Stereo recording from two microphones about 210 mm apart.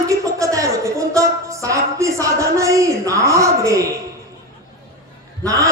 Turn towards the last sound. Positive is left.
turn(degrees=-15)  # may be behind; listen again after turning